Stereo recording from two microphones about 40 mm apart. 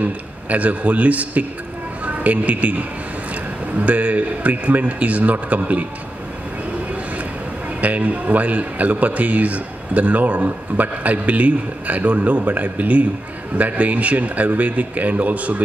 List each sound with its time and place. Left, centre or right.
0.0 s a man's voice: right
7.8 s a man's voice: right